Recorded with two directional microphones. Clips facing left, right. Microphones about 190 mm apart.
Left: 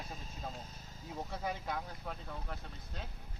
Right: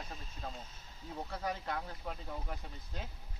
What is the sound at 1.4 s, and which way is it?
Speech, 5° left (ahead or behind).